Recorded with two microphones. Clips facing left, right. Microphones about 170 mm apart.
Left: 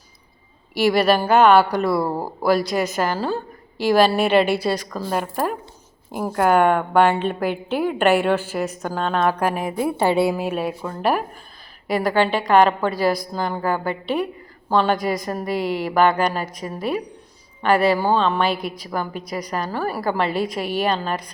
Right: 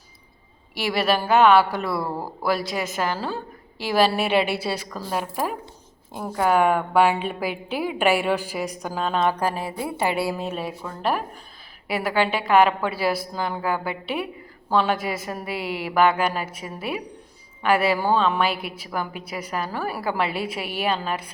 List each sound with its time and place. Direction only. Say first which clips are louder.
0.8 s a woman's voice: left 6 dB; centre (ahead or behind)
2.0 s speech: left 4 dB; 30° left (ahead or behind)
2.4 s a woman's voice: left 6 dB; centre (ahead or behind)
9.6 s a woman's voice: left 5 dB; 20° left (ahead or behind)
10.3 s a woman's voice: left 5 dB; 5° left (ahead or behind)